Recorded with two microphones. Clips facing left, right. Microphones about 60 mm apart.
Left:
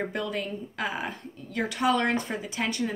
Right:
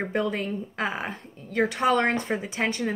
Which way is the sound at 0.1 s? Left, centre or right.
Right.